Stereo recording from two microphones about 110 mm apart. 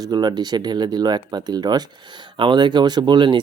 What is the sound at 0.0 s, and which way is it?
Speech, 40° right (ahead or behind).